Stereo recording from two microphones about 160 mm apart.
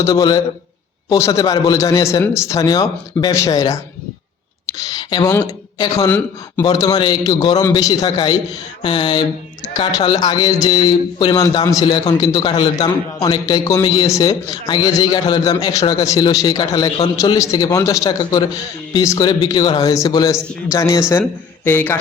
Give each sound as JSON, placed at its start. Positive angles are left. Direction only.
{"t": 0.0, "sound": "speech", "side_deg": 25}
{"t": 4.8, "sound": "speech", "side_deg": 25}
{"t": 6.1, "sound": "a man's voice", "side_deg": 10}
{"t": 6.7, "sound": "speech", "side_deg": 25}